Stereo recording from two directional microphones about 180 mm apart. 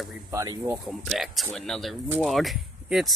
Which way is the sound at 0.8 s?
Centre (ahead or behind).